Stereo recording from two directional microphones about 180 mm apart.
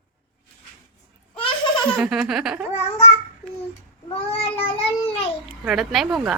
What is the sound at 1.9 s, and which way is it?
Baby laughter, 5° right (ahead or behind).